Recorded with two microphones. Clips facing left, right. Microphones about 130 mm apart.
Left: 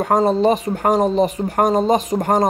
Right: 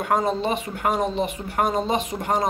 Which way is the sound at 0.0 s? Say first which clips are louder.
Left 7 dB; 40° left (ahead or behind).